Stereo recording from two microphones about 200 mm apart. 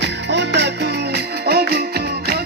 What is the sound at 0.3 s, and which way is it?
Music, 60° right (ahead or behind).